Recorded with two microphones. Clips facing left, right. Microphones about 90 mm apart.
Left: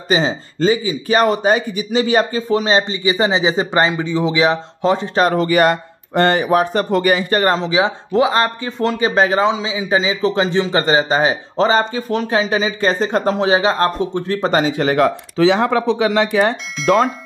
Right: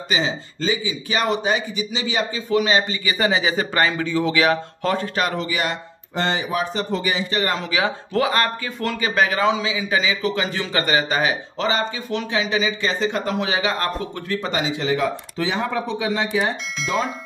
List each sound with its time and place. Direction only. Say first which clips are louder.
0.1 s speech: left 6 dB; 35° left (ahead or behind)
2.5 s speech: left 3 dB; 30° left (ahead or behind)
5.2 s speech: left 10 dB; 45° left (ahead or behind)
7.5 s speech: left 6 dB; 25° left (ahead or behind); by 17.1 s 60° left (ahead or behind)